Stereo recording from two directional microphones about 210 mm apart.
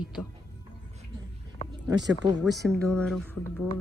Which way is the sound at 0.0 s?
5° right (ahead or behind).